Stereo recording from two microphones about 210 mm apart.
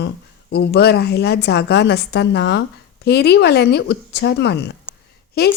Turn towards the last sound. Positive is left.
turn(degrees=50)  # may be behind; listen again after turning